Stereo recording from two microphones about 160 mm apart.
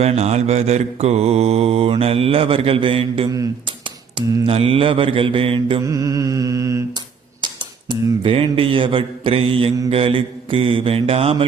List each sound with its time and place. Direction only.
0.0 s mantra: 45° right (ahead or behind)
3.2 s mantra: 20° right (ahead or behind)
4.4 s mantra: 35° right (ahead or behind)
5.8 s mantra: 20° right (ahead or behind)
7.4 s mantra: 30° right (ahead or behind)